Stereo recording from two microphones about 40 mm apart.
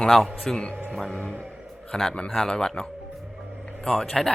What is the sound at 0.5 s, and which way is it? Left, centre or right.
Speech, left.